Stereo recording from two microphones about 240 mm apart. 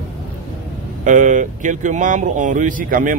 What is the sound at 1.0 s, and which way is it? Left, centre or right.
Speech, right.